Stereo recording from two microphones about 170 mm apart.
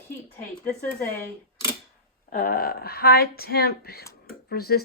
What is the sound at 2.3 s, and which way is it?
Speech, 55° left (ahead or behind).